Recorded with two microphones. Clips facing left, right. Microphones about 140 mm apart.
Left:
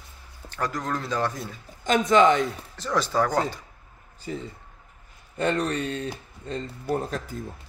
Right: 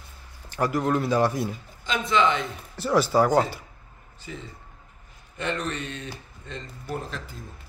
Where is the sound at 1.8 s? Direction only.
45° left (ahead or behind).